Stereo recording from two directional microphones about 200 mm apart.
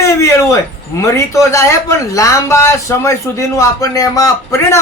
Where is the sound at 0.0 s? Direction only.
15° left (ahead or behind).